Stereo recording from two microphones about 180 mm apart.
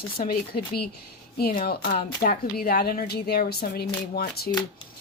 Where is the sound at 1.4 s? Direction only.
55° left (ahead or behind).